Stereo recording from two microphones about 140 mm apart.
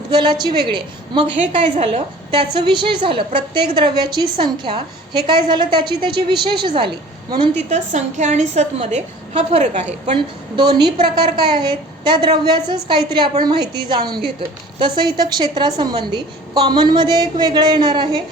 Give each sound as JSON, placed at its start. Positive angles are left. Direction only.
{"t": 0.1, "sound": "a woman's voice", "side_deg": -35}
{"t": 7.7, "sound": "a woman's voice", "side_deg": -60}
{"t": 10.1, "sound": "a woman's voice", "side_deg": -35}